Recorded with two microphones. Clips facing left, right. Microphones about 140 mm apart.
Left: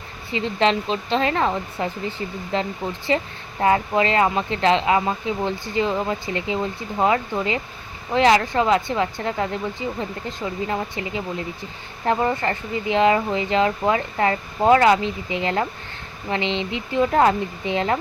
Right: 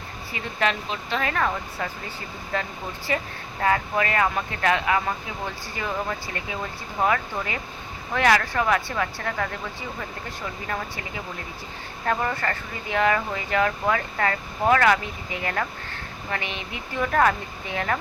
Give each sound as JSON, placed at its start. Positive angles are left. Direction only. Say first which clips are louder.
{"t": 0.3, "sound": "speech", "louder": "left 6 dB", "side_deg": 25}